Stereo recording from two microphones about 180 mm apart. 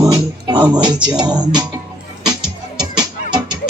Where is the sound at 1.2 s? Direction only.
25° right (ahead or behind).